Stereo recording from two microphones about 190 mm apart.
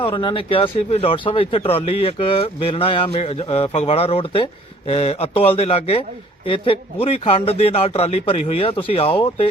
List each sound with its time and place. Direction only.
0.1 s speech: 25° left (ahead or behind)